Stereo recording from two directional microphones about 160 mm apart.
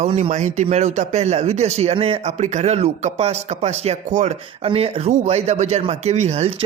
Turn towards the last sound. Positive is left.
turn(degrees=-45)  # may be behind; listen again after turning